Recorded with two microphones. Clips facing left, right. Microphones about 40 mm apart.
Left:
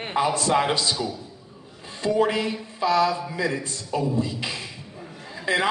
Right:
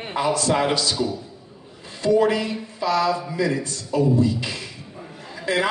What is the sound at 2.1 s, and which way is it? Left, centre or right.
A man's voice, left.